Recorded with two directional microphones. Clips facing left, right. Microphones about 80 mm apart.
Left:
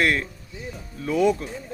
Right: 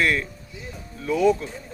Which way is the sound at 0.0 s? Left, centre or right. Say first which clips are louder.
Even; left.